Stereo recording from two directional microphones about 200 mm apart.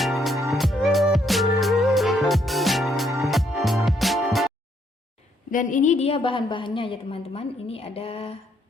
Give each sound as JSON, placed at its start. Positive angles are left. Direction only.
{"t": 0.0, "sound": "music", "side_deg": 0}
{"t": 5.5, "sound": "a woman's voice", "side_deg": 40}